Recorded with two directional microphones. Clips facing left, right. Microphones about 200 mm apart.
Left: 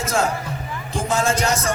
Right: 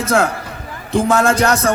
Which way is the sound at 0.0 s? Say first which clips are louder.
Right 5 dB; 60° right (ahead or behind).